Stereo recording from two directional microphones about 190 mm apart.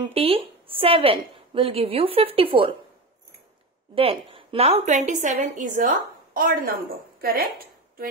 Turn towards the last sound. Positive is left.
turn(degrees=-55)  # may be behind; listen again after turning